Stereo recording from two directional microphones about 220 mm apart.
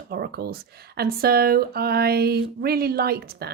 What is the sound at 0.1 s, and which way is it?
A woman's voice, 45° right (ahead or behind).